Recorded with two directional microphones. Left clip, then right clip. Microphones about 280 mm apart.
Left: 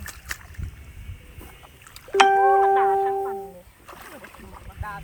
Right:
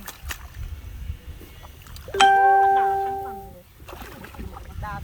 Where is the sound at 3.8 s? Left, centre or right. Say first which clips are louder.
Right 2 dB; centre.